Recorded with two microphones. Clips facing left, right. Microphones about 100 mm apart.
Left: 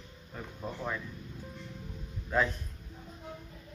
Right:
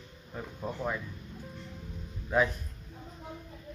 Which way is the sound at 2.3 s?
10° right (ahead or behind).